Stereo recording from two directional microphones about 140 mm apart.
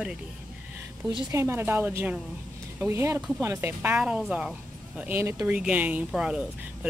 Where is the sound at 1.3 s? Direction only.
20° right (ahead or behind).